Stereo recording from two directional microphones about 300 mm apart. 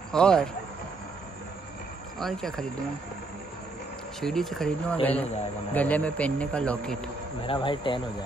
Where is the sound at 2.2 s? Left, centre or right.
Centre.